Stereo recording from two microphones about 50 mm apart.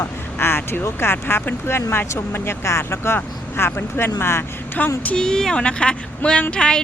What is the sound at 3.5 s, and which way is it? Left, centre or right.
Speech, left.